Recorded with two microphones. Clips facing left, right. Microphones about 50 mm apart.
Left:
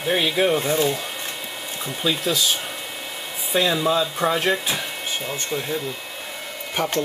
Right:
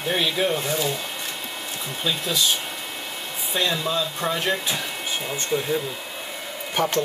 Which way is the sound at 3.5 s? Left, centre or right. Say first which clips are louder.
Left 4 dB; centre.